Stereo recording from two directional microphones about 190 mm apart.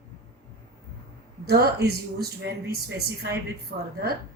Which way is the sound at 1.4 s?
55° right (ahead or behind).